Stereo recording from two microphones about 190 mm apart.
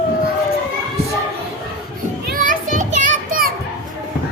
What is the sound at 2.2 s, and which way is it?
Children playing, 45° right (ahead or behind).